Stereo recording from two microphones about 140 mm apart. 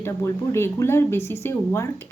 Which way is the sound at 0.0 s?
20° left (ahead or behind).